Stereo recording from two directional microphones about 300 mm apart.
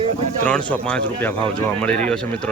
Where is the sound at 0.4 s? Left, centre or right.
Centre.